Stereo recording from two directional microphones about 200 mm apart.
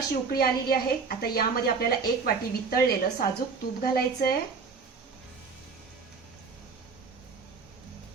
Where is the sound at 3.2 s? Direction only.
50° left (ahead or behind).